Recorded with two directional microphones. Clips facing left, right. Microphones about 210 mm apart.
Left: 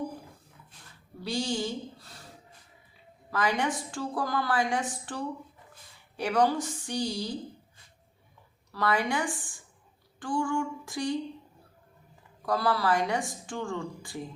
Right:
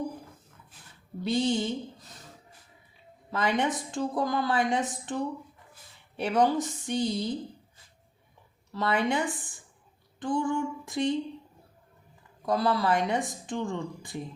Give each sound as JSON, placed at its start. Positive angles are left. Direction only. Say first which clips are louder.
{"t": 1.2, "sound": "a woman's voice", "louder": "right 4 dB", "side_deg": -20}
{"t": 3.2, "sound": "a woman's voice", "louder": "right 1 dB", "side_deg": -20}
{"t": 8.7, "sound": "a woman's voice", "louder": "right 1 dB", "side_deg": -20}
{"t": 12.5, "sound": "a woman's voice", "louder": "right 1 dB", "side_deg": -20}